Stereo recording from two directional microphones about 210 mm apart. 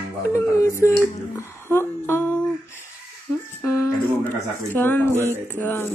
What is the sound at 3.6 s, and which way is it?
Speech, 15° left (ahead or behind).